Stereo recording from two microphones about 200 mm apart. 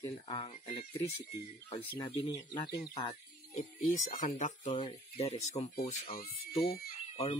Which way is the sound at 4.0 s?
40° left (ahead or behind).